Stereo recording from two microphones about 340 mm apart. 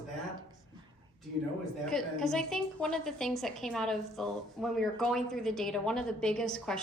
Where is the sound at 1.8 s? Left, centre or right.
Centre.